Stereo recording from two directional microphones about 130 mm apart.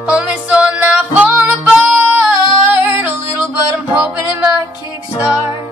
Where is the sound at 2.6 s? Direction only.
15° right (ahead or behind).